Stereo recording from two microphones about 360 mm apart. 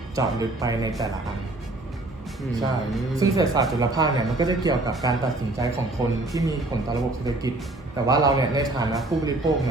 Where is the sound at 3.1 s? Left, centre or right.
Centre.